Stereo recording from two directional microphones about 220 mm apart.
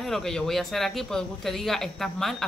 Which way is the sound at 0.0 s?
Centre (ahead or behind).